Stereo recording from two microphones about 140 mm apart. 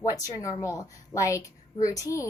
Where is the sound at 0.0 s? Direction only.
25° left (ahead or behind).